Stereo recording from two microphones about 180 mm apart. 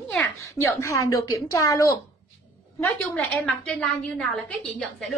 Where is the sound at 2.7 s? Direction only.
5° left (ahead or behind).